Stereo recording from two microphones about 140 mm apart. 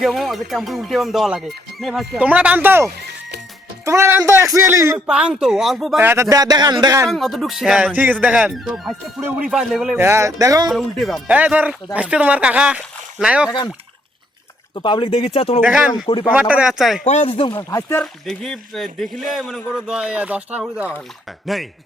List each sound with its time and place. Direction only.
0.0 s a man's voice: centre (ahead or behind); by 4.9 s 20° right (ahead or behind)
5.0 s speech: 5° right (ahead or behind)
6.0 s a man's voice: 15° right (ahead or behind)
7.1 s speech: centre (ahead or behind)
10.0 s a man's voice: 20° right (ahead or behind)
10.7 s speech: centre (ahead or behind)
11.3 s speech: 10° right (ahead or behind)
14.8 s speech: 35° left (ahead or behind)
15.6 s speech: 10° right (ahead or behind)
17.0 s speech: 55° left (ahead or behind)
17.5 s speech: 25° left (ahead or behind)
18.0 s speech: 5° left (ahead or behind)
21.4 s speech: centre (ahead or behind)